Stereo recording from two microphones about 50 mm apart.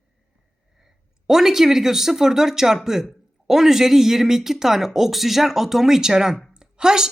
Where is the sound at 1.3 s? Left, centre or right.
Centre.